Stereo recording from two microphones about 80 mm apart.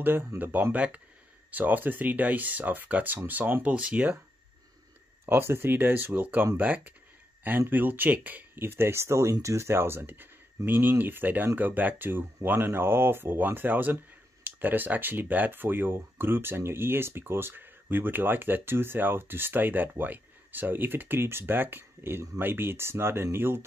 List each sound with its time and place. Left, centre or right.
0.0 s speech: right
5.2 s speech: right